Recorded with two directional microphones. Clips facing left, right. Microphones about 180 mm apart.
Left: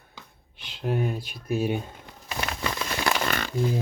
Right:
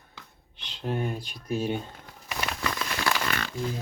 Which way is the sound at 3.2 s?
40° left (ahead or behind).